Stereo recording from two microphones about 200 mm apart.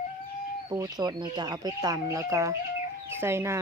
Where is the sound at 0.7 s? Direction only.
20° right (ahead or behind).